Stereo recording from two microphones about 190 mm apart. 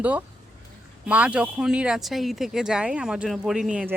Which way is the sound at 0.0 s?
10° right (ahead or behind).